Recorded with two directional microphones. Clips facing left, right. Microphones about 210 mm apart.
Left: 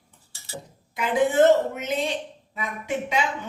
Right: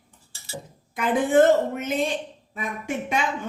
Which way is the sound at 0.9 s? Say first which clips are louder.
Right 2 dB; 50° right (ahead or behind).